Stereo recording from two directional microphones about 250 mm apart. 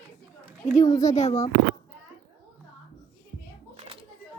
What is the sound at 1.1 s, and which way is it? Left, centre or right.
Speech, left.